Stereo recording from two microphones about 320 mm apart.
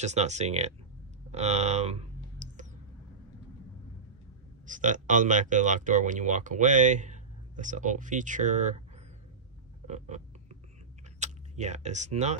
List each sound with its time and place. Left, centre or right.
0.0 s speech: right
1.3 s clicking: right
4.6 s speech: right
9.8 s a sound: right
11.1 s speech: right